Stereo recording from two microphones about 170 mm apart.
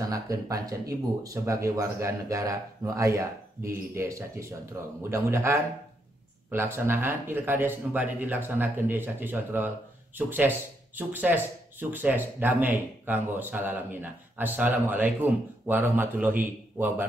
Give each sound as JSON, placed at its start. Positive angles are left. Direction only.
{"t": 0.1, "sound": "speech", "side_deg": -20}